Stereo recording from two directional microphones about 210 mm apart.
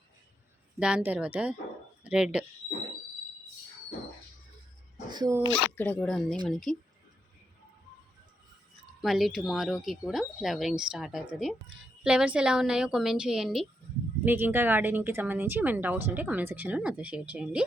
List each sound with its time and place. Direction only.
0.8 s speech: 5° right (ahead or behind)
5.0 s speech: 20° right (ahead or behind)
5.4 s speech: 25° left (ahead or behind)
5.7 s speech: 10° left (ahead or behind)
9.0 s a woman's voice: centre (ahead or behind)